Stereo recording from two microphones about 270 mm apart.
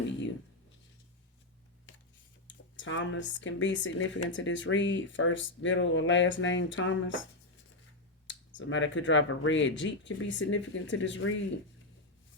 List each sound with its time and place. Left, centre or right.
2.7 s speech: left
8.3 s speech: left